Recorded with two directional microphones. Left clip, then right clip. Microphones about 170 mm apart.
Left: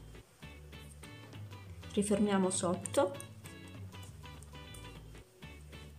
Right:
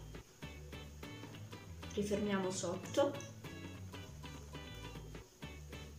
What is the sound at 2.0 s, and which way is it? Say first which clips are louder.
Speech: left 6 dB; 25° left (ahead or behind).